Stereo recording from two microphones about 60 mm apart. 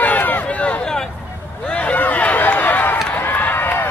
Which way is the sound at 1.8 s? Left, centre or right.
Left.